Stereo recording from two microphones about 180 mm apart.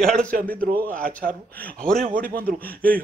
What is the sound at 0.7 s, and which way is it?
Speech, 50° right (ahead or behind).